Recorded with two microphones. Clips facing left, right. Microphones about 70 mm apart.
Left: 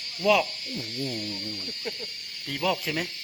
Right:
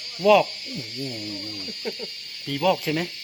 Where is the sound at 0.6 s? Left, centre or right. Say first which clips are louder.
Even; left.